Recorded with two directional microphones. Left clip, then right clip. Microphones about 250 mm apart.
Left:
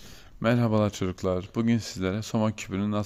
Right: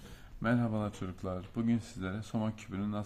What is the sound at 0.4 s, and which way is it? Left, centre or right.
Speech, left.